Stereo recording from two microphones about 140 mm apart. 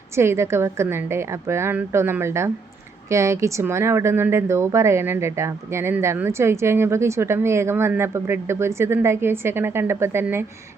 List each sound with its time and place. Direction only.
0.2 s speech: 20° right (ahead or behind)